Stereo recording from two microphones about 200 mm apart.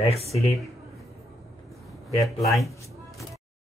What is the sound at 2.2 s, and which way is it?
Speech, centre (ahead or behind).